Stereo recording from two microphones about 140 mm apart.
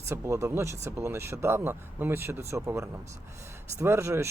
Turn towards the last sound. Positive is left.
turn(degrees=-20)  # may be behind; listen again after turning